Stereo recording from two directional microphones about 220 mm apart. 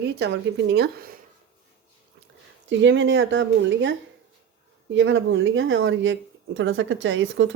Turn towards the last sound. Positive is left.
turn(degrees=-60)  # may be behind; listen again after turning